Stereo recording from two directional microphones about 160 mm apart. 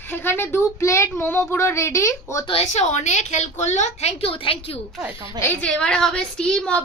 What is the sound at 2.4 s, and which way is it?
A woman's voice, 40° left (ahead or behind).